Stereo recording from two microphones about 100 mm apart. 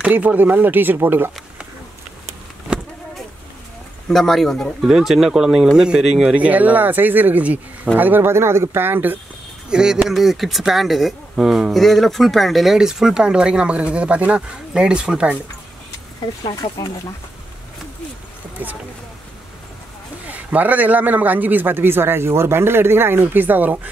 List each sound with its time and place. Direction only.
0.1 s speech: 15° right (ahead or behind)
2.7 s a sound: 10° right (ahead or behind)
4.1 s speech: 5° left (ahead or behind)
6.3 s speech: 15° right (ahead or behind)
9.7 s speech: 10° right (ahead or behind)
20.2 s speech: 15° right (ahead or behind)